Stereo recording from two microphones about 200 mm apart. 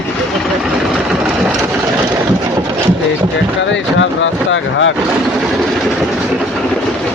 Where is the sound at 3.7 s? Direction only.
70° left (ahead or behind).